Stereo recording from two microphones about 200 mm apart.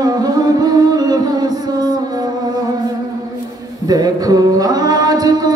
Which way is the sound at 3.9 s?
20° right (ahead or behind).